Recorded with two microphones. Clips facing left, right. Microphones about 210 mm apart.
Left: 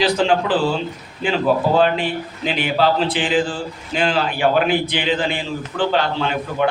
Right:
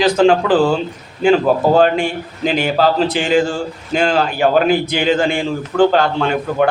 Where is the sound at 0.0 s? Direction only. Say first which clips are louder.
Right 5 dB; 45° right (ahead or behind).